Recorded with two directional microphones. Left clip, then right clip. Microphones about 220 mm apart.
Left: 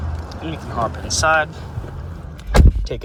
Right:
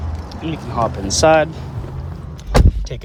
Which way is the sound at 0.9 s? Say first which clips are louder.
Right 4 dB; 40° right (ahead or behind).